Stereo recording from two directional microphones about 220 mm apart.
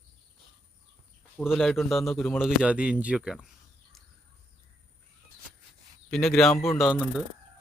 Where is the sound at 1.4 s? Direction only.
Centre (ahead or behind).